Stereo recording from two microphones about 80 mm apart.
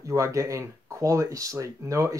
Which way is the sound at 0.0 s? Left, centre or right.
Right.